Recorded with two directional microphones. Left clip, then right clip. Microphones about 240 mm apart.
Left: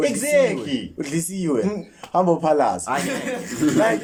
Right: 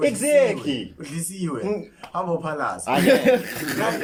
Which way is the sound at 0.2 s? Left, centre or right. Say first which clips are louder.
Even; centre.